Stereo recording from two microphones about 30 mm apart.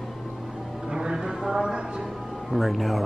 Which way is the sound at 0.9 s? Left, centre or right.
Right.